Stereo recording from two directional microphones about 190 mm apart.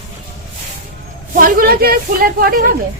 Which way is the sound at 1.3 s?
50° right (ahead or behind).